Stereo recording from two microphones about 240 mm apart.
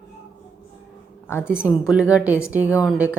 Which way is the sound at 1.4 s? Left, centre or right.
Centre.